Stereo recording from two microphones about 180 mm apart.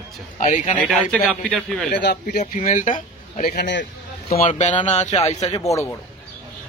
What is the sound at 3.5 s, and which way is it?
Speech, 75° left (ahead or behind).